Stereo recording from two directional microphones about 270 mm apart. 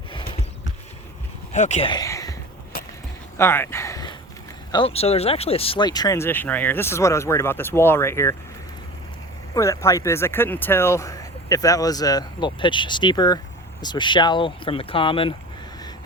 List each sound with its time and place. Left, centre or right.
1.5 s speech: left
3.3 s a sound: centre
4.7 s speech: left
9.6 s speech: centre